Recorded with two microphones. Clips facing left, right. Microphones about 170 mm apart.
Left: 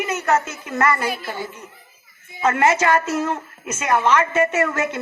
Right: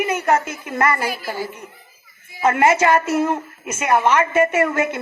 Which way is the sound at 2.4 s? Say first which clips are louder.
Right 2 dB; 10° right (ahead or behind).